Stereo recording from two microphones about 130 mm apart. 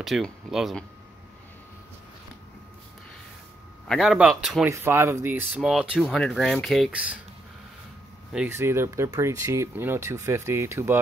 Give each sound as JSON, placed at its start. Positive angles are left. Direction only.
{"t": 0.0, "sound": "speech", "side_deg": 0}
{"t": 3.8, "sound": "speech", "side_deg": 0}
{"t": 4.6, "sound": "speech", "side_deg": -20}
{"t": 5.6, "sound": "speech", "side_deg": -5}
{"t": 8.5, "sound": "speech", "side_deg": -20}